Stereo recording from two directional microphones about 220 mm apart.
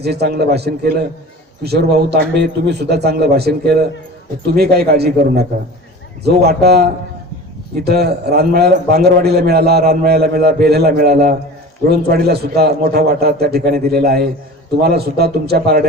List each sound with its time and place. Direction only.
0.0 s a man's voice: 50° right (ahead or behind)